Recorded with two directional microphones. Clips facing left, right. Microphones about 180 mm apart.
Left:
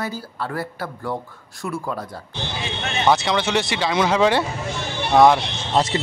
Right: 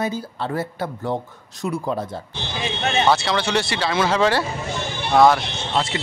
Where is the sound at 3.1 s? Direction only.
20° left (ahead or behind).